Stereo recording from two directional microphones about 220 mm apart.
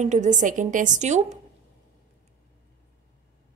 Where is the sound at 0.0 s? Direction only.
30° right (ahead or behind).